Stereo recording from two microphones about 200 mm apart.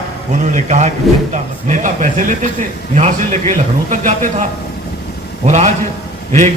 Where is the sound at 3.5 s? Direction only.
40° right (ahead or behind).